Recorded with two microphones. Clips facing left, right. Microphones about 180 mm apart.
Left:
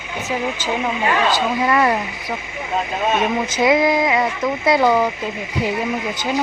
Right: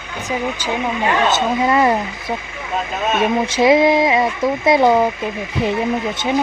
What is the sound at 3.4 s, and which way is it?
Speech, 25° right (ahead or behind).